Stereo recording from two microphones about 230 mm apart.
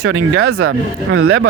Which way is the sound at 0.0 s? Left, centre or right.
Right.